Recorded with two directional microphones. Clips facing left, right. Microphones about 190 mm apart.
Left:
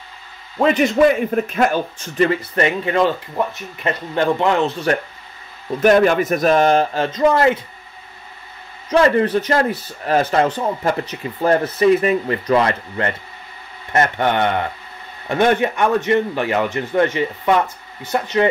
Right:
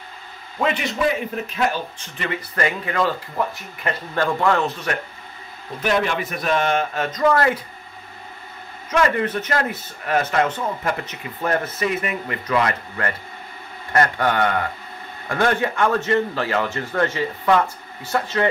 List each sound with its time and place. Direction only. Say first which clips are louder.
0.6 s a man's voice: left 8 dB; 40° left (ahead or behind)
2.5 s a man's voice: left 5 dB; 25° left (ahead or behind)
5.8 s speech: left 8 dB; 45° left (ahead or behind); by 7.6 s 20° left (ahead or behind)
8.9 s a man's voice: left 6 dB; 30° left (ahead or behind)